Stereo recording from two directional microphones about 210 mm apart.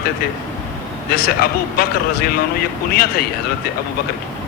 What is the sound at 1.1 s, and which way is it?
Speech, 45° left (ahead or behind).